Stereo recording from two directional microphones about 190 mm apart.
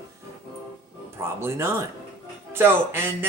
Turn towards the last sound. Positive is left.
turn(degrees=-10)  # may be behind; listen again after turning